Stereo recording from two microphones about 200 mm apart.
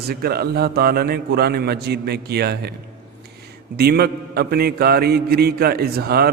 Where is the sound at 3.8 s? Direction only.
50° right (ahead or behind).